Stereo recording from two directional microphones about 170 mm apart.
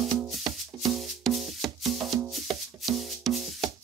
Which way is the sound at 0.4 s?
25° right (ahead or behind).